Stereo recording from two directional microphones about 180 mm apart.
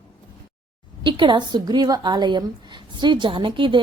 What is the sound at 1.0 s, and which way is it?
A woman's voice, 25° right (ahead or behind).